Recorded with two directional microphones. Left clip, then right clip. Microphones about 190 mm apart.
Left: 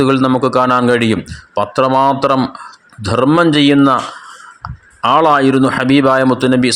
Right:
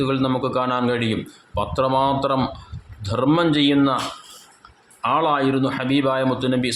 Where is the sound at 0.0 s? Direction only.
40° left (ahead or behind).